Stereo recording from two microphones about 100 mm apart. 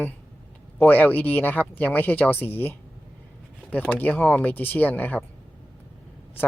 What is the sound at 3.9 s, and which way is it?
Speech, 15° left (ahead or behind).